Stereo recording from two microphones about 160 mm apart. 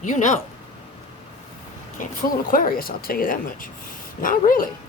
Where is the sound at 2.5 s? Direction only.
60° left (ahead or behind).